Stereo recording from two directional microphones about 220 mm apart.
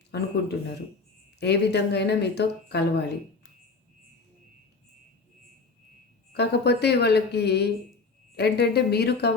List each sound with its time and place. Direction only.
0.1 s speech: 50° left (ahead or behind)
1.4 s speech: 50° left (ahead or behind)
6.3 s speech: 50° left (ahead or behind)